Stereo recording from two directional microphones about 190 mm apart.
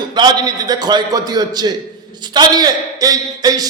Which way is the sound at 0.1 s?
25° right (ahead or behind).